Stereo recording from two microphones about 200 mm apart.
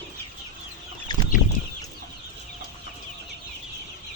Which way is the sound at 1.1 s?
20° left (ahead or behind).